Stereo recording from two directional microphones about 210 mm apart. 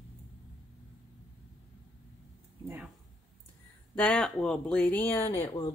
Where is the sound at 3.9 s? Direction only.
5° left (ahead or behind).